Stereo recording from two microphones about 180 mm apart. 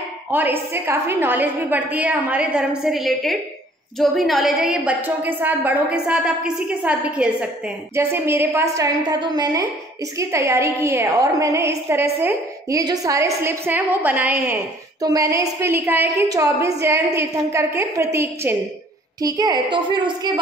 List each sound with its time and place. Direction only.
0.3 s a woman's voice: 10° right (ahead or behind)
15.0 s a woman's voice: 20° right (ahead or behind)